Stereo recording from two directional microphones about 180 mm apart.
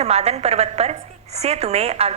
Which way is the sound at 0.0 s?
35° right (ahead or behind).